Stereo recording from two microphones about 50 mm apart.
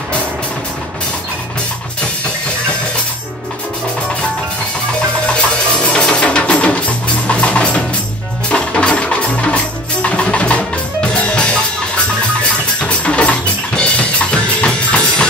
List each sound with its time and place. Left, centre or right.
5.2 s music: left
7.2 s drum: left
8.5 s music: left
12.8 s music: left